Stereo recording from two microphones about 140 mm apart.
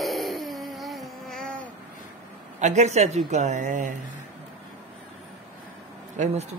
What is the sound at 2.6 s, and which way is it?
Speech, 55° right (ahead or behind).